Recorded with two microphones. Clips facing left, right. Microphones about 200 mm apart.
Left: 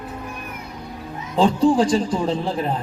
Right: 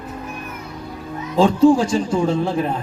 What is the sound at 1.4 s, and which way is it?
A man's voice, 35° left (ahead or behind).